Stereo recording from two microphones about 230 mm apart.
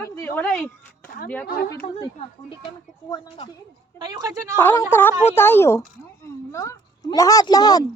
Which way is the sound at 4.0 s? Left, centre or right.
Centre.